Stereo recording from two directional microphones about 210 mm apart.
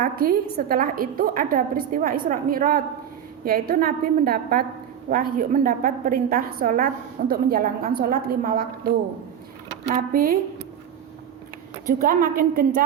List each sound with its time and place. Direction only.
0.0 s a woman's voice: 45° right (ahead or behind)
9.8 s a woman's voice: 40° right (ahead or behind)
11.9 s a woman's voice: 45° right (ahead or behind)